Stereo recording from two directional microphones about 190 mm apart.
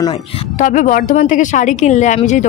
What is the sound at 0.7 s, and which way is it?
Speech, 45° left (ahead or behind).